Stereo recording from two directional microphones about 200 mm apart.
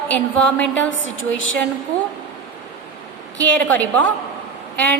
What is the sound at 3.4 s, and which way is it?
Speech, 10° left (ahead or behind).